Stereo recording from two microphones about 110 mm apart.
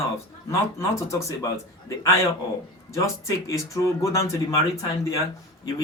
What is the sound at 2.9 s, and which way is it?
Speech, 30° left (ahead or behind).